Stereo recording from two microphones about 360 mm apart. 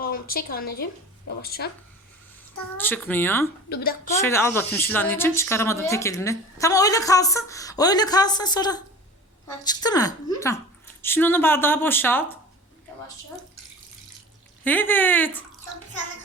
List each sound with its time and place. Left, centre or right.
0.0 s a woman's voice: left
2.7 s speech: centre
3.7 s a woman's voice: left
4.2 s speech: centre
14.6 s speech: centre